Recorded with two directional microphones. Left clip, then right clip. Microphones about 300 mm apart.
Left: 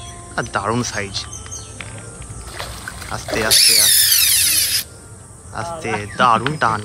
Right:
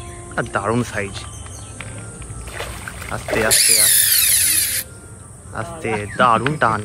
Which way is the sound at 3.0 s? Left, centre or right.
Centre.